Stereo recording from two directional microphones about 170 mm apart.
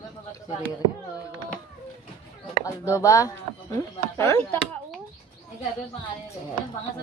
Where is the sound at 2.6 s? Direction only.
20° left (ahead or behind).